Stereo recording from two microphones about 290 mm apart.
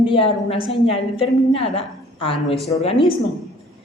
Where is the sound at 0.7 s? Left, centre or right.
Centre.